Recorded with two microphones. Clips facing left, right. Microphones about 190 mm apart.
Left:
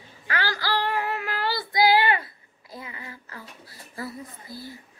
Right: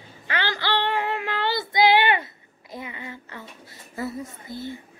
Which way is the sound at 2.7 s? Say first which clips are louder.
Right 4 dB; 25° right (ahead or behind).